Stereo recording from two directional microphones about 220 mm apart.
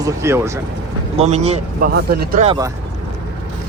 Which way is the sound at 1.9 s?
45° right (ahead or behind).